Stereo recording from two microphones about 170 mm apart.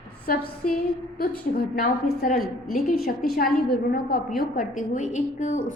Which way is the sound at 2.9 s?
60° left (ahead or behind).